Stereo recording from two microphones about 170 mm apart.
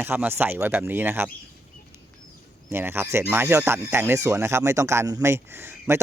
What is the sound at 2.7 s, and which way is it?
Speech, 15° right (ahead or behind).